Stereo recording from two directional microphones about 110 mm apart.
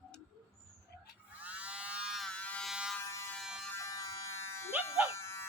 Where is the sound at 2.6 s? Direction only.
5° right (ahead or behind).